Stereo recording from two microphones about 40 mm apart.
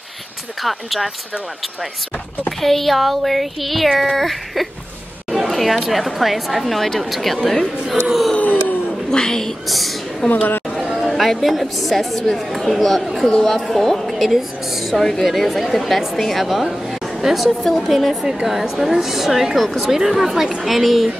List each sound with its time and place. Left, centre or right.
0.6 s a woman's voice: centre
2.6 s a woman's voice: centre
8.4 s a sound: left
9.1 s a woman's voice: centre
9.7 s a woman's voice: centre
10.3 s speech: left
10.9 s chatter: centre
11.4 s a woman's voice: centre
14.1 s a woman's voice: centre